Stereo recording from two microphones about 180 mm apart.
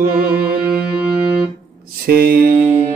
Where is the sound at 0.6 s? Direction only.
10° right (ahead or behind).